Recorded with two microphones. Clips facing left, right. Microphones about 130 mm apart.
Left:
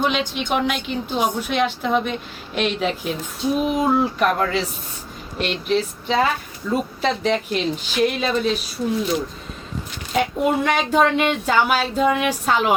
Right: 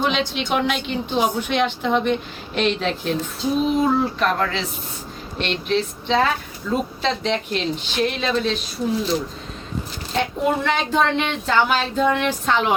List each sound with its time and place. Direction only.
0.0 s speech: centre (ahead or behind)
10.2 s speech: 10° left (ahead or behind)